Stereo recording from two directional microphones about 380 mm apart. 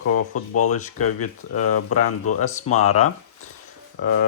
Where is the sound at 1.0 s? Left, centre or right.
Left.